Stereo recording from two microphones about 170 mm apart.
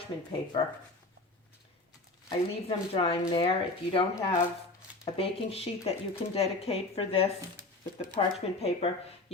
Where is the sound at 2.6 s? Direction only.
35° left (ahead or behind).